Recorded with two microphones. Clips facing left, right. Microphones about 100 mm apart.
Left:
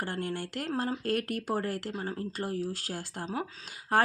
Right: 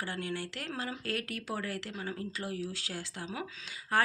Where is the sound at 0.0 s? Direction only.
50° left (ahead or behind).